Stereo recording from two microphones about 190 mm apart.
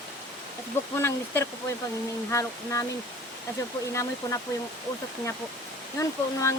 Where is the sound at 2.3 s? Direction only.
15° left (ahead or behind).